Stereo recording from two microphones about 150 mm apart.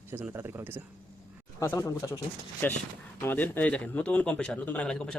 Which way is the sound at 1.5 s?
15° left (ahead or behind).